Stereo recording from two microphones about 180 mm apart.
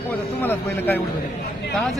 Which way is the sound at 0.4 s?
10° left (ahead or behind).